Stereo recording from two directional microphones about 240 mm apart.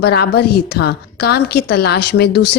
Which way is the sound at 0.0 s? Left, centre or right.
Left.